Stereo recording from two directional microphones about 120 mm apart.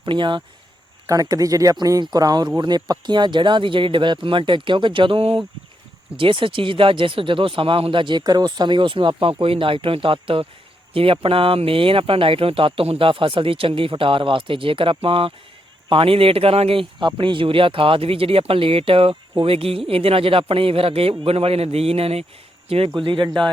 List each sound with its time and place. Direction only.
0.0 s speech: 40° right (ahead or behind)
1.0 s speech: 30° right (ahead or behind); by 22.3 s 55° right (ahead or behind)
23.0 s speech: 45° right (ahead or behind)